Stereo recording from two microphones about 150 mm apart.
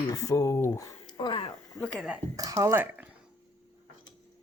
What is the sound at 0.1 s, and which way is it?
Speech, 25° left (ahead or behind).